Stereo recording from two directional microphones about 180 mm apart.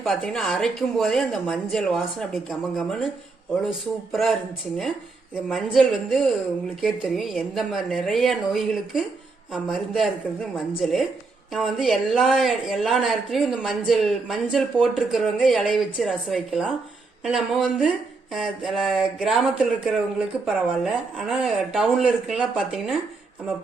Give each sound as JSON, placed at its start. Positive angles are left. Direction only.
{"t": 0.0, "sound": "a woman's voice", "side_deg": 5}
{"t": 4.1, "sound": "a woman's voice", "side_deg": 0}
{"t": 5.5, "sound": "a woman's voice", "side_deg": 0}